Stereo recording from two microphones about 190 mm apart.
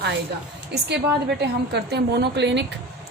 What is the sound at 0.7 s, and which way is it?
A woman's voice, 60° right (ahead or behind).